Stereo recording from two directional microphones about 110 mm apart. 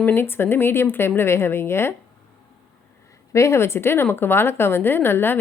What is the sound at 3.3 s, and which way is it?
Speech, 25° left (ahead or behind).